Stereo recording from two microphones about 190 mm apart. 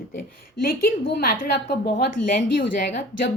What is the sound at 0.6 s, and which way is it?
Speech, 50° left (ahead or behind).